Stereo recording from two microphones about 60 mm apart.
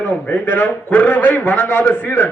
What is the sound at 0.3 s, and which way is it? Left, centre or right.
A man's voice, left.